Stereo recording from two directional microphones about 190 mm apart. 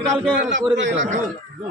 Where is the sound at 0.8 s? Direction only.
75° right (ahead or behind).